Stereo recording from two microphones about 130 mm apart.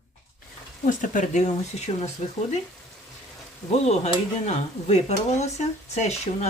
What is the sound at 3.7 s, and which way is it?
Speech, 55° left (ahead or behind).